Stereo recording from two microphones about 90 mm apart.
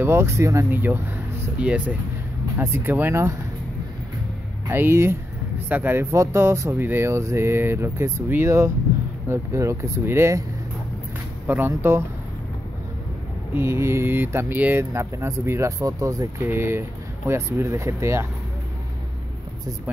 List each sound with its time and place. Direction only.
0.0 s speech: 30° right (ahead or behind)
2.5 s speech: 25° right (ahead or behind)
4.6 s speech: 25° right (ahead or behind)
11.4 s speech: 25° right (ahead or behind)
13.6 s speech: 30° right (ahead or behind)
14.9 s speech: 30° right (ahead or behind)
16.4 s speech: 25° right (ahead or behind)